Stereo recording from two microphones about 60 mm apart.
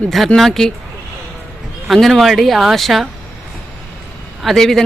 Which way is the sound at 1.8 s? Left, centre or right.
Centre.